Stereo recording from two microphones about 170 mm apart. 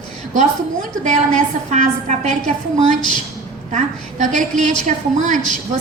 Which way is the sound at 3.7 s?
45° right (ahead or behind).